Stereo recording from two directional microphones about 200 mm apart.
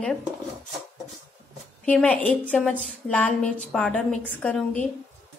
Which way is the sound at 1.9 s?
5° left (ahead or behind).